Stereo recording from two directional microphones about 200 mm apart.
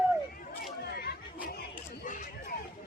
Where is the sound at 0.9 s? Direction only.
50° left (ahead or behind).